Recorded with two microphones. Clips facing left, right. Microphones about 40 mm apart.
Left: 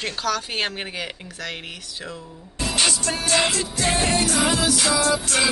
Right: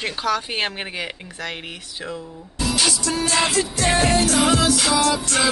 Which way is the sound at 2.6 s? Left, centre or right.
Left.